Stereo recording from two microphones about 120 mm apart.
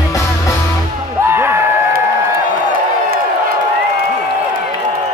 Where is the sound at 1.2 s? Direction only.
20° right (ahead or behind).